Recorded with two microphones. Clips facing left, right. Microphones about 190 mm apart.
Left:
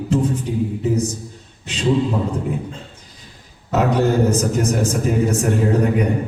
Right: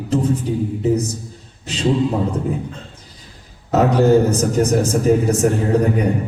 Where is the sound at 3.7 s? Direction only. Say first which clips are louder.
Right 4 dB; 35° right (ahead or behind).